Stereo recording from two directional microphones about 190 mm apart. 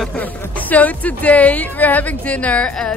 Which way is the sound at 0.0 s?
5° left (ahead or behind).